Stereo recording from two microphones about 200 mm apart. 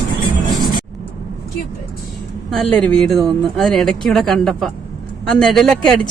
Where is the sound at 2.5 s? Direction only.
5° left (ahead or behind).